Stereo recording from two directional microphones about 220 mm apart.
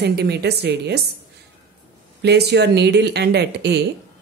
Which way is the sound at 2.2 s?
50° right (ahead or behind).